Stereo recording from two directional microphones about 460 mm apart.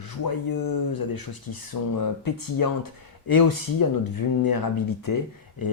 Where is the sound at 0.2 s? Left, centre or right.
Left.